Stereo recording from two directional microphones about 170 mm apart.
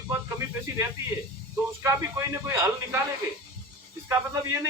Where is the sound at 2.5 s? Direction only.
15° right (ahead or behind).